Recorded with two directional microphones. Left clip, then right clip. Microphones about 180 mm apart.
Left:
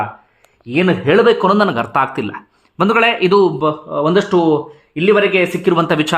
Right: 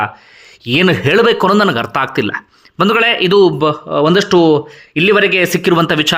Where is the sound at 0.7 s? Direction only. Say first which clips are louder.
Right 2 dB; 20° right (ahead or behind).